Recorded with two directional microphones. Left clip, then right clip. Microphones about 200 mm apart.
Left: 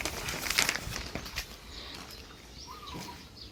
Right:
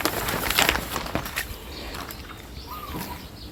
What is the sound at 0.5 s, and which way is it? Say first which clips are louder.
Crumpling: right 8 dB; 50° right (ahead or behind).